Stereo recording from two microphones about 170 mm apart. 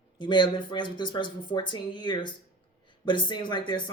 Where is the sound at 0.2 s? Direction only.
25° left (ahead or behind).